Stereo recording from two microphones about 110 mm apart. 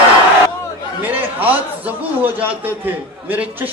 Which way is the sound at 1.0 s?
15° right (ahead or behind).